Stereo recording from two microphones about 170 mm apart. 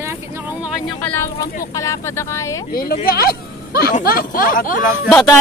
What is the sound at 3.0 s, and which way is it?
Speech, 65° left (ahead or behind).